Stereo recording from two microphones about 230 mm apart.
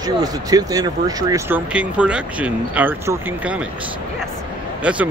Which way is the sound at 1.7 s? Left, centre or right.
Centre.